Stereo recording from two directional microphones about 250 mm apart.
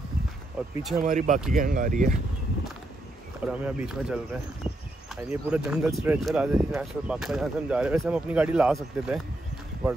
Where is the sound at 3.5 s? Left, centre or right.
Centre.